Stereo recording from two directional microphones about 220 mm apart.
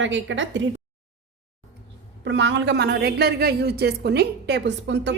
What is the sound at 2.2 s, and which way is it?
A woman's voice, 55° right (ahead or behind).